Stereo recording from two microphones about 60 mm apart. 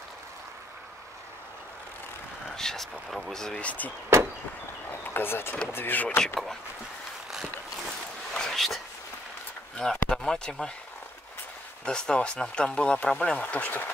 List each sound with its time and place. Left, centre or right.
2.4 s speech: centre
3.6 s speech: left
5.0 s speech: left
6.0 s speech: centre
8.3 s a sound: centre
9.8 s speech: centre
11.8 s speech: centre; by 13.9 s left